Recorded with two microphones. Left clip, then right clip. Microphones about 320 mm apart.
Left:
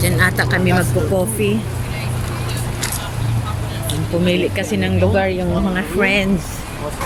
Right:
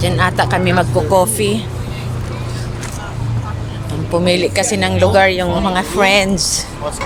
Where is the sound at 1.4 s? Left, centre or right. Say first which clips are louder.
Right 2 dB; centre.